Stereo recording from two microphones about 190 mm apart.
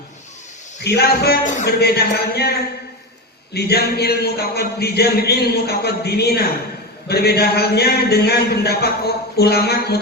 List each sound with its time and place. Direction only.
0.9 s a man's voice: 55° left (ahead or behind)